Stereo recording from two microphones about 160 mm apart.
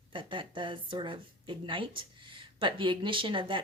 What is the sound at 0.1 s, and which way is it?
Speech, 30° right (ahead or behind).